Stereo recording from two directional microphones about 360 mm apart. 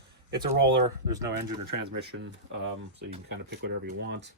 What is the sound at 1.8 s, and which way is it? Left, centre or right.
Speech, right.